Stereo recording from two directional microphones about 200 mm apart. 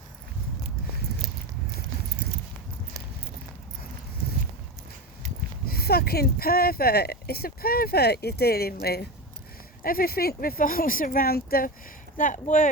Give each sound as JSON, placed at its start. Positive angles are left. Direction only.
{"t": 5.6, "sound": "speech", "side_deg": 50}